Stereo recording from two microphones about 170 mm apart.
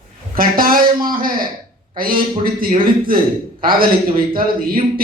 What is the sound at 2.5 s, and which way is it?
A woman's voice, 55° right (ahead or behind).